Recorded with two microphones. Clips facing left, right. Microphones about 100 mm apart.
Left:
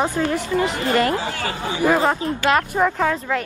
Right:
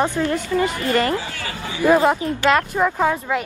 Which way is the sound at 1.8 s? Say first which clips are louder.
Right 3 dB; 20° left (ahead or behind).